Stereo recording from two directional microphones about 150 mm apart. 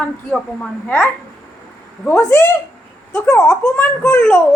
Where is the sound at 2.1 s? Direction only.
20° left (ahead or behind).